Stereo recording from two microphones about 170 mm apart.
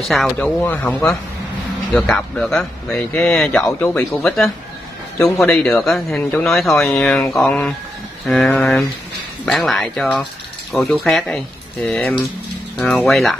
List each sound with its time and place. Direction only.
0.1 s speech: 5° left (ahead or behind)